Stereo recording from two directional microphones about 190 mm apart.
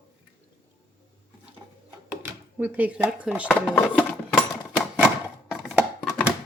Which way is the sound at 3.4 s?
5° left (ahead or behind).